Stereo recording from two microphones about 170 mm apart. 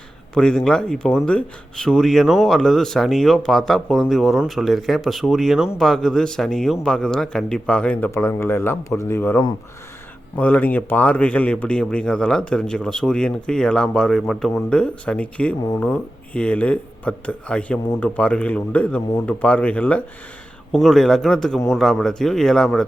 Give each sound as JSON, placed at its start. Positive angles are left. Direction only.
{"t": 0.3, "sound": "a man's voice", "side_deg": 5}